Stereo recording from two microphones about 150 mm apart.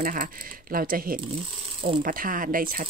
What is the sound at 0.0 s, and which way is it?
Speech, 70° right (ahead or behind).